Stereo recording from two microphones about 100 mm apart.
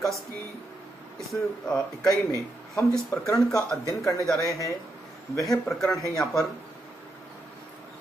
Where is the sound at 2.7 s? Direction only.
30° left (ahead or behind).